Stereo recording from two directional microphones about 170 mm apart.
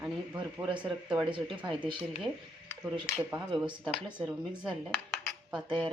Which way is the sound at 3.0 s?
5° right (ahead or behind).